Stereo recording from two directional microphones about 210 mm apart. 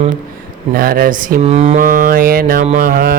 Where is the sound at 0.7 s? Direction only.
45° right (ahead or behind).